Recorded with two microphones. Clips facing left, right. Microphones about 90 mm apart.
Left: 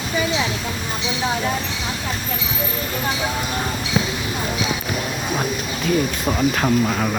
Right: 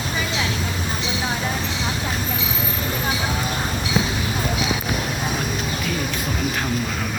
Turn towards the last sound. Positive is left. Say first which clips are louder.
# left 6 dB
turn(degrees=65)  # may be behind; listen again after turning